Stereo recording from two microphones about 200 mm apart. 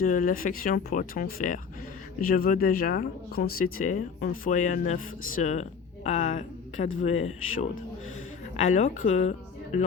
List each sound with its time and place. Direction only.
0.0 s a woman's voice: 40° left (ahead or behind)
8.5 s speech: 35° left (ahead or behind)